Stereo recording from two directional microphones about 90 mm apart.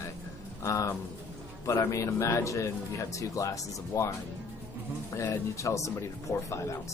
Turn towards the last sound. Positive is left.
turn(degrees=35)  # may be behind; listen again after turning